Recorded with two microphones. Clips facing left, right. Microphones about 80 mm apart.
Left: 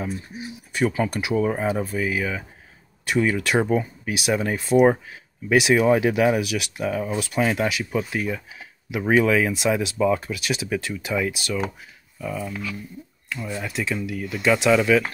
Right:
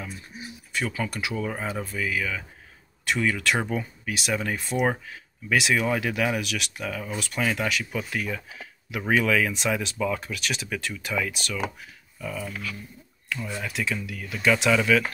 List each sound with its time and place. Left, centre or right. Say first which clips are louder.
0.7 s speech: left 7 dB; left
4.1 s speech: left 5 dB; centre
4.6 s speech: left 10 dB; centre
5.5 s speech: left 6 dB; centre
10.2 s speech: left 4 dB; centre
13.4 s speech: left 3 dB; centre